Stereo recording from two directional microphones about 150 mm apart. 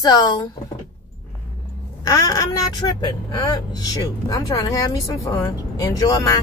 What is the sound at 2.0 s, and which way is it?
Speech, 25° left (ahead or behind).